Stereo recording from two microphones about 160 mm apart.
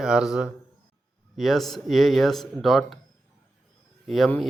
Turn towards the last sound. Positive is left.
turn(degrees=0)  # may be behind; listen again after turning